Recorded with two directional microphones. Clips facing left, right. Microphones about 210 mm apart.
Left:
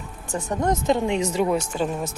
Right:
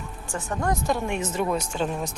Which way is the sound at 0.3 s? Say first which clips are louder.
Left 4 dB; 20° left (ahead or behind).